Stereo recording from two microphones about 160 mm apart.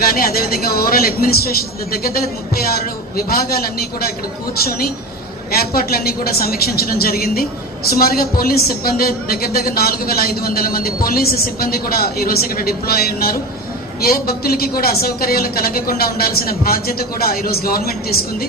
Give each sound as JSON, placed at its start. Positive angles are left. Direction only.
{"t": 0.0, "sound": "a woman's voice", "side_deg": 70}